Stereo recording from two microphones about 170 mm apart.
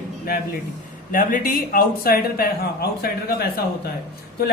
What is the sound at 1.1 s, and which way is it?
A woman's voice, 55° left (ahead or behind).